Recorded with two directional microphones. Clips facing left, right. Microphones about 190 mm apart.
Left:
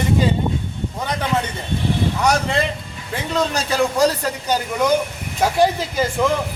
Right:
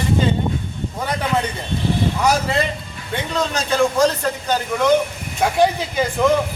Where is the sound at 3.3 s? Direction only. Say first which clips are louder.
Left 1 dB; 5° left (ahead or behind).